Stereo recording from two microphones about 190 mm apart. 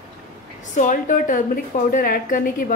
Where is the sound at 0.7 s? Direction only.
40° left (ahead or behind).